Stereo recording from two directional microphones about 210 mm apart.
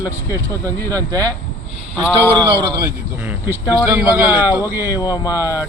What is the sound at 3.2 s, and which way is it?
Speech, 10° right (ahead or behind).